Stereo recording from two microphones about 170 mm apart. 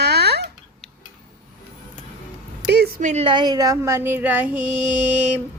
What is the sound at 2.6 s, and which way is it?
Speech, 70° right (ahead or behind).